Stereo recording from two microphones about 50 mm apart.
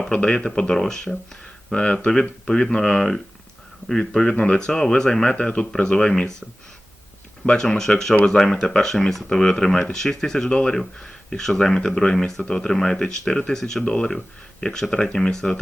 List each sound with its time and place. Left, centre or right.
0.1 s speech: left
7.4 s speech: centre
13.8 s speech: left